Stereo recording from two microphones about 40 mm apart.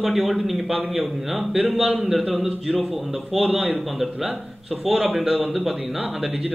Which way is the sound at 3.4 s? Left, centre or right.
Right.